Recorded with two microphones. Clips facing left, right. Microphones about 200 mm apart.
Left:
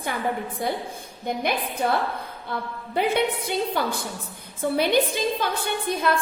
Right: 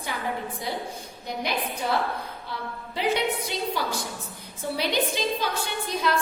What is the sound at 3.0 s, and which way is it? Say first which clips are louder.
A woman's voice: left 3 dB; 55° left (ahead or behind).